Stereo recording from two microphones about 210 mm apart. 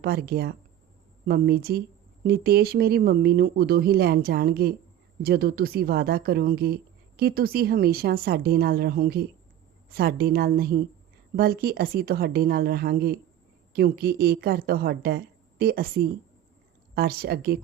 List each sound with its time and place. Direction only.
0.0 s speech: 50° right (ahead or behind)